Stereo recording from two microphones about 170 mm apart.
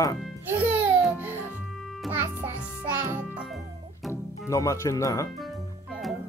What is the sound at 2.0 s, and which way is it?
A child's voice, 10° right (ahead or behind).